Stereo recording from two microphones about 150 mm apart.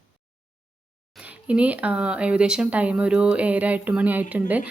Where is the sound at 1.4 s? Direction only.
10° right (ahead or behind).